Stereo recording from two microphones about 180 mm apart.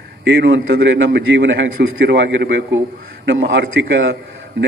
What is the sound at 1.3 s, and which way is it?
A man's voice, 65° right (ahead or behind).